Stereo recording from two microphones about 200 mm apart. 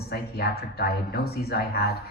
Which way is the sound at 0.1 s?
50° left (ahead or behind).